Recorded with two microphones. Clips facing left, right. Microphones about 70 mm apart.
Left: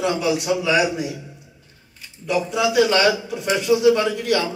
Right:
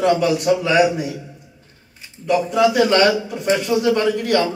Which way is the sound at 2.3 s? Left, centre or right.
Right.